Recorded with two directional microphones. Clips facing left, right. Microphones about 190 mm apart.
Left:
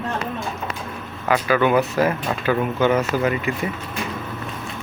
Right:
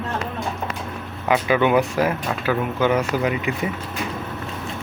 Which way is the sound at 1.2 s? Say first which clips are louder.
Even; 20° right (ahead or behind).